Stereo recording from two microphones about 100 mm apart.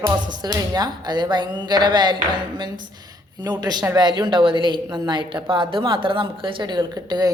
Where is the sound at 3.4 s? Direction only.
45° right (ahead or behind).